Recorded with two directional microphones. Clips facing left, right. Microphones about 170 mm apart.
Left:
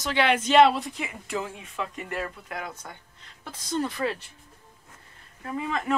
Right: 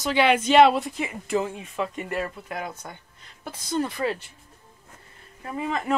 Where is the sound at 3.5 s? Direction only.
5° right (ahead or behind).